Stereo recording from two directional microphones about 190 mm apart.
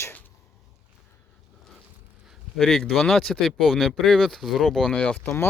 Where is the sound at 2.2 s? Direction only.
Centre (ahead or behind).